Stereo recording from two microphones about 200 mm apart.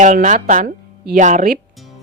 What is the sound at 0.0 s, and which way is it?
A woman's voice, 40° right (ahead or behind).